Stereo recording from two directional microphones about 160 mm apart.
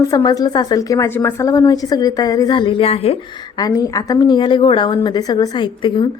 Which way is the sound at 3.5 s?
25° left (ahead or behind).